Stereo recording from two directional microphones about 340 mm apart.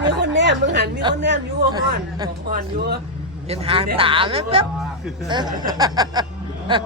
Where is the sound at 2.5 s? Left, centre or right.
Right.